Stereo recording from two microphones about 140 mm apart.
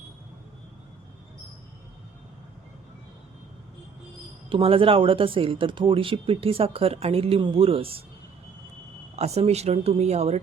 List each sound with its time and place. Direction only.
4.4 s speech: 40° right (ahead or behind)
9.1 s speech: 50° right (ahead or behind)